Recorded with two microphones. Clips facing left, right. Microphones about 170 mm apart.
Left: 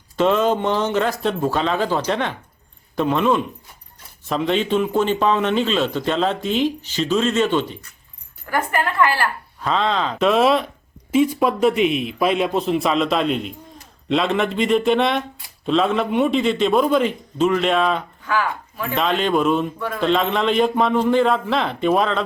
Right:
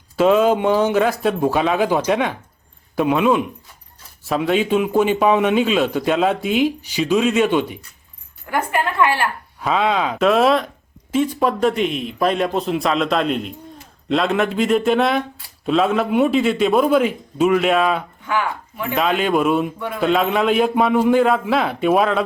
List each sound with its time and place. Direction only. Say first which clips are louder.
0.2 s a man's voice: right 3 dB; 5° right (ahead or behind)
9.6 s a man's voice: right 2 dB; 10° right (ahead or behind)
18.3 s speech: even; 20° right (ahead or behind)
18.9 s a man's voice: right 1 dB; 5° right (ahead or behind)